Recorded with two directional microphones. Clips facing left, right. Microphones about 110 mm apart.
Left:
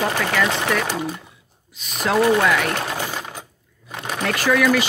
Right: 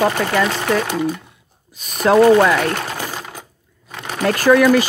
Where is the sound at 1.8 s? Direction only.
45° right (ahead or behind).